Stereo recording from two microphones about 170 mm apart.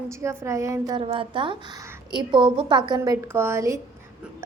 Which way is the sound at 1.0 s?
30° right (ahead or behind).